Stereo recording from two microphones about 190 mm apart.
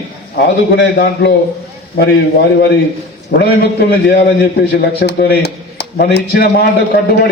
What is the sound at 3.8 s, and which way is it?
A man's voice, 60° left (ahead or behind).